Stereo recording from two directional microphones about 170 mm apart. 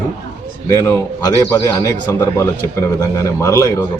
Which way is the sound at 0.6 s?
15° left (ahead or behind).